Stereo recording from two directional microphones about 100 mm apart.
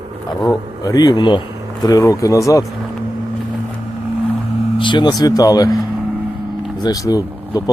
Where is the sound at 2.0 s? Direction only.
30° left (ahead or behind).